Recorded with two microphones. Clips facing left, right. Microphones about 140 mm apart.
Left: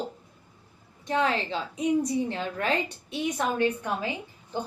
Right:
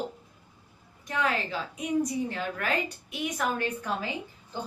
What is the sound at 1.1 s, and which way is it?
A woman's voice, 30° left (ahead or behind).